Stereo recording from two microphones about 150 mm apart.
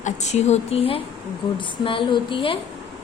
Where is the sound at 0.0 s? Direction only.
50° left (ahead or behind).